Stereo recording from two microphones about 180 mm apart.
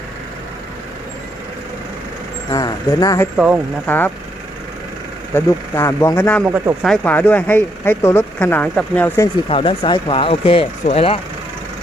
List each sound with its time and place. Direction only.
2.5 s speech: 20° left (ahead or behind)
3.3 s speech: 5° right (ahead or behind)
3.8 s speech: 10° left (ahead or behind)
5.3 s speech: 15° left (ahead or behind)
9.5 s speech: 30° left (ahead or behind)